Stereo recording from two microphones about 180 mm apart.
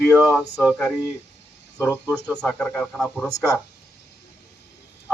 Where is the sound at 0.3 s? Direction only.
5° left (ahead or behind).